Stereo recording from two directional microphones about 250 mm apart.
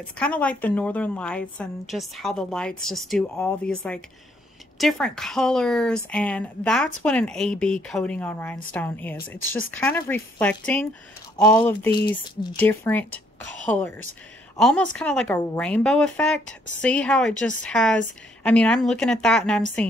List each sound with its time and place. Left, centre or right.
0.2 s a woman's voice: centre
14.6 s a woman's voice: centre